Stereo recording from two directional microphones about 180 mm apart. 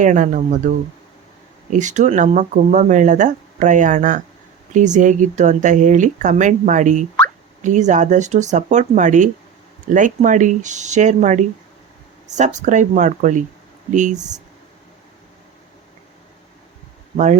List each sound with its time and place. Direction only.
0.0 s speech: 45° right (ahead or behind)
1.7 s speech: 45° right (ahead or behind)